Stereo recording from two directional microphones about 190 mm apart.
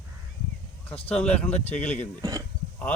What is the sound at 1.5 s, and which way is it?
Speech, 35° left (ahead or behind).